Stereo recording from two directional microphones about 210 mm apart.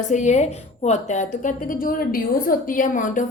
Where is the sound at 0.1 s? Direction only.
35° left (ahead or behind).